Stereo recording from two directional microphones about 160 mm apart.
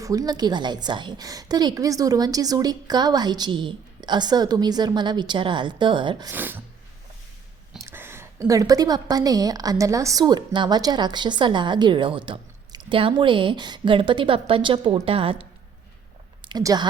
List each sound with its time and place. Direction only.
0.0 s a woman's voice: 20° right (ahead or behind)
6.3 s speech: 10° right (ahead or behind)
7.8 s a woman's voice: 15° right (ahead or behind); by 15.4 s 35° right (ahead or behind)
16.5 s speech: 25° right (ahead or behind)